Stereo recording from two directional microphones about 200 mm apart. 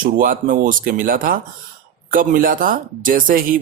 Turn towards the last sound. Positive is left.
turn(degrees=-45)  # may be behind; listen again after turning